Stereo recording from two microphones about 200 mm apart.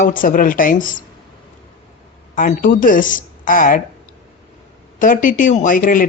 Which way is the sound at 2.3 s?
40° left (ahead or behind).